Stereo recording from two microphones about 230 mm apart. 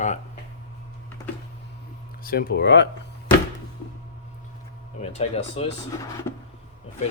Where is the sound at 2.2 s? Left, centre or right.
Left.